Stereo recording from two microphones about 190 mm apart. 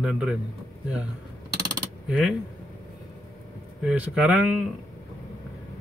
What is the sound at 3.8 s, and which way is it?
Speech, 5° right (ahead or behind).